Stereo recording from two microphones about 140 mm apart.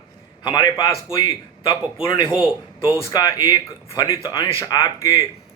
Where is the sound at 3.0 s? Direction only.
25° left (ahead or behind).